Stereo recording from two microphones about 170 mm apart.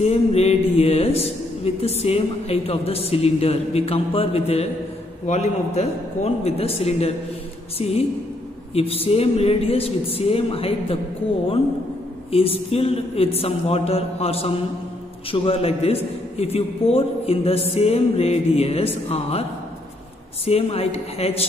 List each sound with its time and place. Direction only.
0.0 s a man's voice: 35° left (ahead or behind)
8.7 s a man's voice: 35° left (ahead or behind)
12.3 s a man's voice: 35° left (ahead or behind)
20.4 s a man's voice: 35° left (ahead or behind)